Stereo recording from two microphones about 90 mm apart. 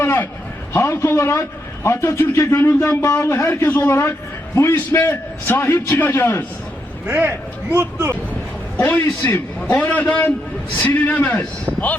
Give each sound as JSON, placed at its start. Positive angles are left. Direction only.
{"t": 0.0, "sound": "a sound", "side_deg": 25}
{"t": 0.7, "sound": "a man's voice", "side_deg": 30}
{"t": 7.1, "sound": "speech", "side_deg": -20}
{"t": 9.2, "sound": "a man's voice", "side_deg": 30}
{"t": 9.6, "sound": "a man's voice", "side_deg": 20}